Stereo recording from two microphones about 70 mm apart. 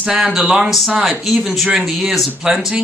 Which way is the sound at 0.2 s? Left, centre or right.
Centre.